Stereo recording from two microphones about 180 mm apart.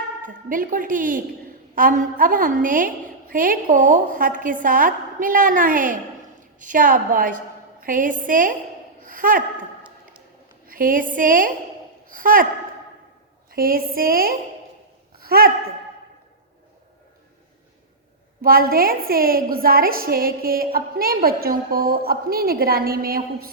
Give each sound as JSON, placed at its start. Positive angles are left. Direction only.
{"t": 0.2, "sound": "a woman's voice", "side_deg": -50}
{"t": 10.7, "sound": "a woman's voice", "side_deg": -50}
{"t": 13.5, "sound": "a woman's voice", "side_deg": -55}
{"t": 18.4, "sound": "a woman's voice", "side_deg": -55}